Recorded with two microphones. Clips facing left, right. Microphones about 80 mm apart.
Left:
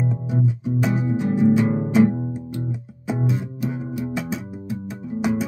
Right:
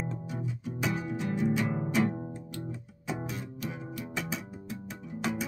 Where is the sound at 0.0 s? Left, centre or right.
Centre.